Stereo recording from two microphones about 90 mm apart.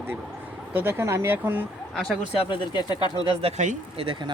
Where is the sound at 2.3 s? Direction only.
65° left (ahead or behind).